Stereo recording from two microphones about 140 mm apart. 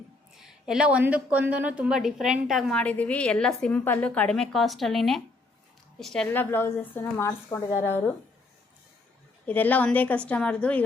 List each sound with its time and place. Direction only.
0.3 s a woman's voice: 5° right (ahead or behind)
6.2 s a woman's voice: 15° left (ahead or behind)
9.5 s a woman's voice: 10° left (ahead or behind)